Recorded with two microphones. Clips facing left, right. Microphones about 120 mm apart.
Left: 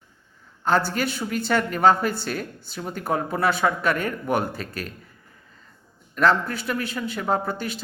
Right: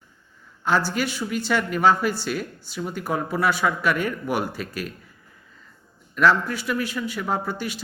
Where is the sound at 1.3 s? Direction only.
40° left (ahead or behind).